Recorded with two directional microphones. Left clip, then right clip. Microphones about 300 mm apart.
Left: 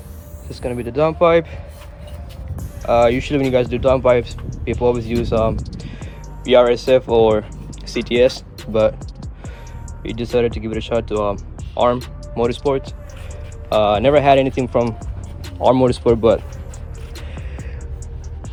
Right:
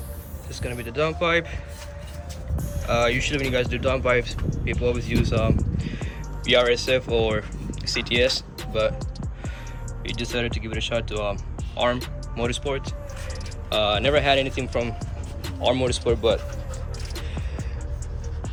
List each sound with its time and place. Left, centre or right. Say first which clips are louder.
0.6 s speech: left 8 dB; centre
2.8 s speech: left 8 dB; centre
10.3 s speech: left 12 dB; centre